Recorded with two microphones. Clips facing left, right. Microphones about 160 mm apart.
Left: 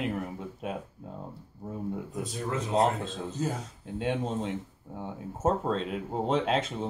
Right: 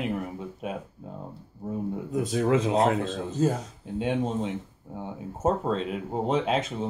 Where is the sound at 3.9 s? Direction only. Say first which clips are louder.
Right 3 dB; 10° right (ahead or behind).